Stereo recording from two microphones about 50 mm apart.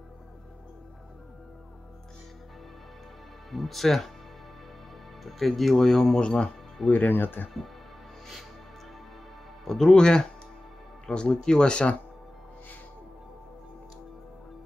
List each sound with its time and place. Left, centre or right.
3.4 s speech: centre
5.2 s speech: centre
6.9 s speech: left
9.7 s speech: centre